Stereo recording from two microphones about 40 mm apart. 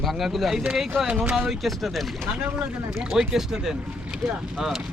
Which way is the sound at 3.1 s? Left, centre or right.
Centre.